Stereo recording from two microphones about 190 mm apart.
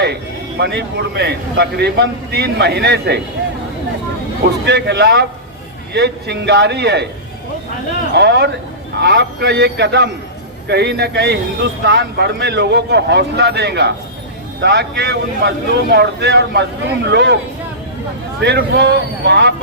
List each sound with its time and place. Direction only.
0.6 s speech: 60° right (ahead or behind)
4.6 s speech: 65° right (ahead or behind)
8.1 s speech: 65° right (ahead or behind)
18.3 s speech: 60° right (ahead or behind)